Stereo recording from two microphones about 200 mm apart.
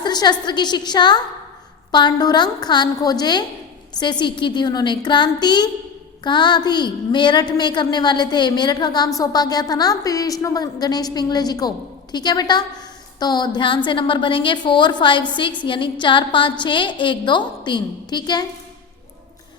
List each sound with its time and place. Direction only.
0.0 s a woman's voice: 20° left (ahead or behind)